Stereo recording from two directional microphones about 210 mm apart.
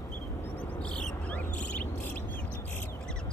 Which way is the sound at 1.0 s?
5° left (ahead or behind).